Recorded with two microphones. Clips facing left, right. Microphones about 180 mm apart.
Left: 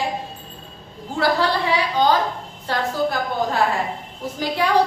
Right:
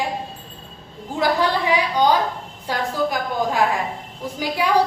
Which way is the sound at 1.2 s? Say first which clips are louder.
Even; 15° right (ahead or behind).